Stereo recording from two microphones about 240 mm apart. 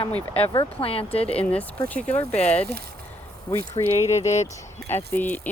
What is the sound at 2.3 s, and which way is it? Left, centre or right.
Speech, left.